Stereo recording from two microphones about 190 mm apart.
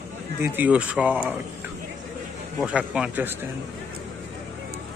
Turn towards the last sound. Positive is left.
turn(degrees=-5)  # may be behind; listen again after turning